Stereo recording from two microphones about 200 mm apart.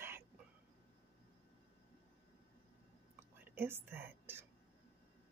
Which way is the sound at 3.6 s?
10° right (ahead or behind).